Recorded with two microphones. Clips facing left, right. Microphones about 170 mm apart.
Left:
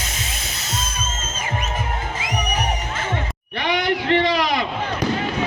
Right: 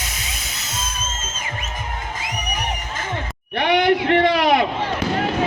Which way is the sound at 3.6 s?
60° right (ahead or behind).